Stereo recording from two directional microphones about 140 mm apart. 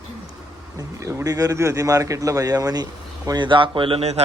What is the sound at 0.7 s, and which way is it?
Speech, 20° right (ahead or behind).